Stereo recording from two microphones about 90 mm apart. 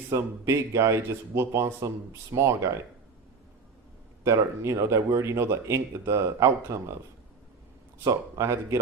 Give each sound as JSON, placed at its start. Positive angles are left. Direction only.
{"t": 0.1, "sound": "speech", "side_deg": -30}
{"t": 4.2, "sound": "speech", "side_deg": -35}
{"t": 8.0, "sound": "speech", "side_deg": -35}